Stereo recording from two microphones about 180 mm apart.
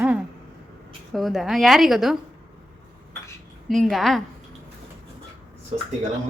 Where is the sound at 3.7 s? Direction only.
Centre (ahead or behind).